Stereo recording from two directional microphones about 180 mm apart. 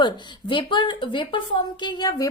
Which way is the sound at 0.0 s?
25° left (ahead or behind).